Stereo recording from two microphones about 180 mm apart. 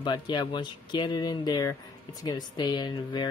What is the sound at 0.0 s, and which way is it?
Speech, 25° left (ahead or behind).